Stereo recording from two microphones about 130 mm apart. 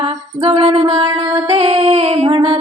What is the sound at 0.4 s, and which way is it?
Music, 50° right (ahead or behind).